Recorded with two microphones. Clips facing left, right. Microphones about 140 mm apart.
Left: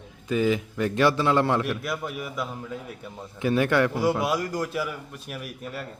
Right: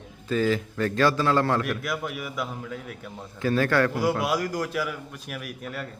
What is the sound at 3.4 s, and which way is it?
Speech, 20° left (ahead or behind).